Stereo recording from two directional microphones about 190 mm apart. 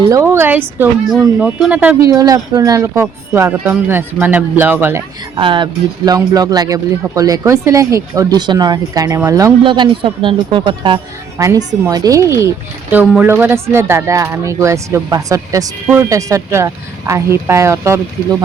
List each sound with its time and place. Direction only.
0.0 s a woman's voice: 15° right (ahead or behind)
2.0 s speech: 20° right (ahead or behind)
5.4 s speech: 25° right (ahead or behind)